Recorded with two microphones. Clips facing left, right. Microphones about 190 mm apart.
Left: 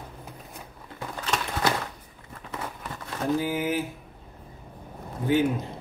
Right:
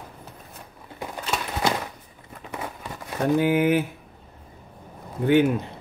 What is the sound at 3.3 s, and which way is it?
Speech, 65° right (ahead or behind).